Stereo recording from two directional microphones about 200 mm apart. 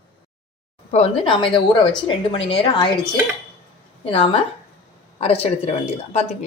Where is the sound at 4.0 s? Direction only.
30° left (ahead or behind).